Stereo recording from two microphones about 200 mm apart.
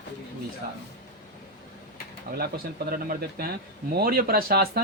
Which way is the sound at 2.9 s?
50° right (ahead or behind).